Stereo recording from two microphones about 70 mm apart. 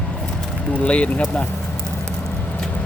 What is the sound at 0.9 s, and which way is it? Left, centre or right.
Speech, centre.